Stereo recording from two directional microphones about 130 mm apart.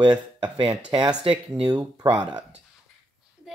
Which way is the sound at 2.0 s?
30° right (ahead or behind).